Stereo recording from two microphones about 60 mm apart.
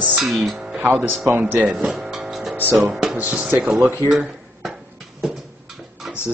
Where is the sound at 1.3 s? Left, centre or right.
Right.